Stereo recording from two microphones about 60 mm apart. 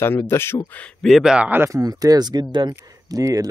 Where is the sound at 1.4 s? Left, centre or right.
Right.